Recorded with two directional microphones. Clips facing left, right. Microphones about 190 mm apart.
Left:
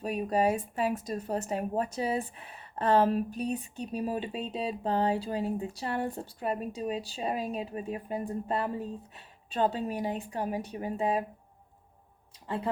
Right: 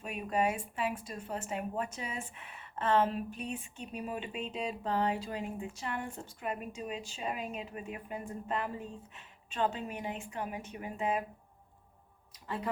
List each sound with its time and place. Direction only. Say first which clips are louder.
0.0 s speech: left 5 dB; 35° left (ahead or behind)
12.3 s music: left 4 dB; 30° left (ahead or behind)